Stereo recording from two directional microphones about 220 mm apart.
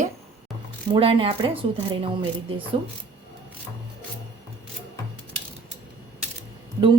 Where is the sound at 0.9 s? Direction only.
25° right (ahead or behind).